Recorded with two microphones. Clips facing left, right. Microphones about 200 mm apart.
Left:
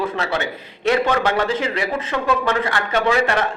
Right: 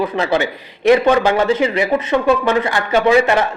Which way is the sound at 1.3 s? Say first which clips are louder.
Right 6 dB; 5° right (ahead or behind).